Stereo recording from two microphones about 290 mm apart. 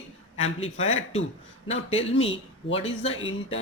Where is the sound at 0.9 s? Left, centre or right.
Left.